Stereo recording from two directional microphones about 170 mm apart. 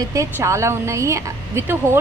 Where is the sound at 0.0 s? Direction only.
20° right (ahead or behind).